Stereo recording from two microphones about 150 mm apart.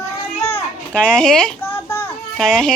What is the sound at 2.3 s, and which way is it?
Speech, 5° left (ahead or behind).